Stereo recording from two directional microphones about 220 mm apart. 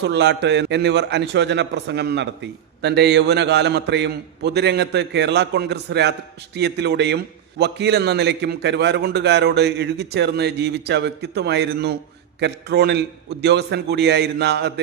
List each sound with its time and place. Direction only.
0.0 s a man's voice: 50° right (ahead or behind)